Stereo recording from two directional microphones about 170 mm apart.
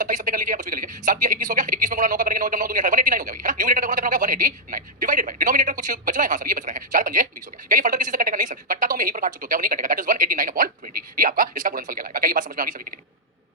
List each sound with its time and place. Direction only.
0.0 s a woman's voice: 50° right (ahead or behind)